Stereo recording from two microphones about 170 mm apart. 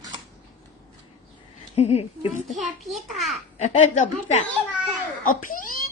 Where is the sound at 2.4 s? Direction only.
Centre (ahead or behind).